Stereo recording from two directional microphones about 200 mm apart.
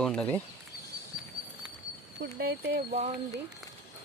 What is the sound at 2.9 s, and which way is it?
Speech, 40° right (ahead or behind).